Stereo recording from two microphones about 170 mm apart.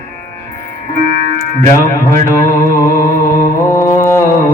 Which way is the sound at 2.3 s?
15° left (ahead or behind).